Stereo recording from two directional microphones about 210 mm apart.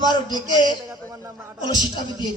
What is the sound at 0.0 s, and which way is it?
Speech, 20° left (ahead or behind).